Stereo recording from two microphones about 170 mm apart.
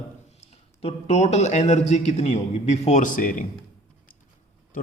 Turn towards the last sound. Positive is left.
turn(degrees=50)  # may be behind; listen again after turning